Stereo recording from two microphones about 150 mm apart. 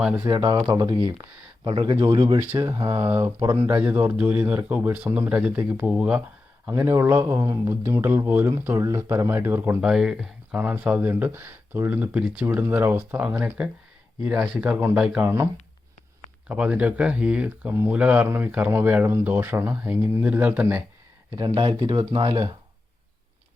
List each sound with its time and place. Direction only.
0.0 s speech: 10° right (ahead or behind)
0.3 s speech: 25° right (ahead or behind)
2.4 s speech: 15° right (ahead or behind)
2.7 s speech: 35° right (ahead or behind)
3.0 s speech: 15° right (ahead or behind)
16.5 s speech: 10° right (ahead or behind)
21.3 s speech: 30° right (ahead or behind)